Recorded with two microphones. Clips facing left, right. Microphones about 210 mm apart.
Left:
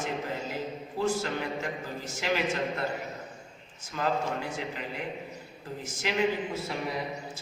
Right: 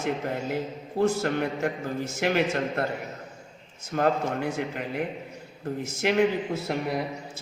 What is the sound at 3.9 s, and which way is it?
A man's voice, 60° right (ahead or behind).